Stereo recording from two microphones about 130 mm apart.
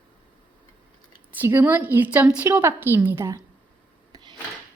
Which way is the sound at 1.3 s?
15° right (ahead or behind).